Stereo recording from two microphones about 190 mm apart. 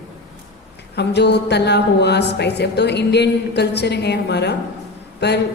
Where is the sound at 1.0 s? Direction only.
60° left (ahead or behind).